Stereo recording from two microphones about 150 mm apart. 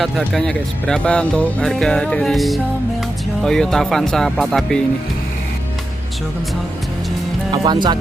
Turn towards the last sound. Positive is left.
turn(degrees=-30)  # may be behind; listen again after turning